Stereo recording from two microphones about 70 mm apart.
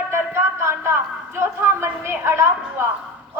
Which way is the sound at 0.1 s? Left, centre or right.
Right.